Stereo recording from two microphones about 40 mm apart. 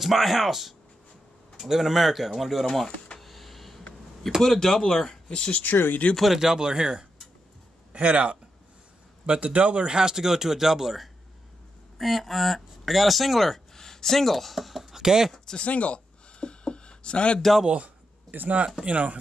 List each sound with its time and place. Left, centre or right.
0.0 s speech: centre
3.2 s a sound: centre
4.4 s speech: centre
5.5 s speech: left
6.1 s speech: centre
6.4 s speech: centre
7.9 s speech: right; by 15.0 s centre
15.0 s speech: centre
15.3 s speech: centre
15.6 s a sound: left
17.6 s speech: right
18.9 s speech: right